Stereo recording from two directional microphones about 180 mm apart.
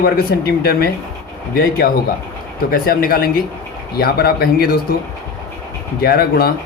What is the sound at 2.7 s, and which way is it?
Speech, 55° left (ahead or behind).